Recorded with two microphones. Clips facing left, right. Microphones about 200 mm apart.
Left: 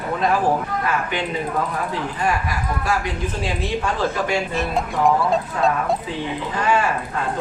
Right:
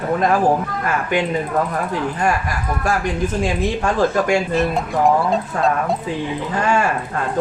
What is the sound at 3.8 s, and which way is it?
Speech, 50° right (ahead or behind).